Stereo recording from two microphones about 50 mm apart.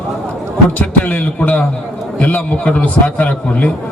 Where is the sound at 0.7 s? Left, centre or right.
Left.